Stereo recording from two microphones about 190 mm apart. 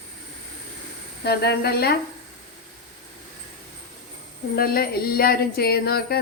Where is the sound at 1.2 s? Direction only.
55° left (ahead or behind).